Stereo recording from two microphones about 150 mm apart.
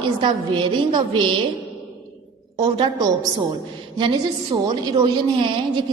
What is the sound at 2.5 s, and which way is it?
Speech, 30° right (ahead or behind).